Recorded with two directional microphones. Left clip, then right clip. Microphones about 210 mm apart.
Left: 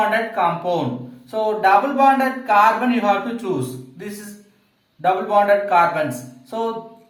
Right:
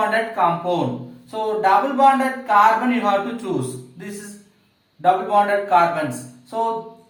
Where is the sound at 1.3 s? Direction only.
30° left (ahead or behind).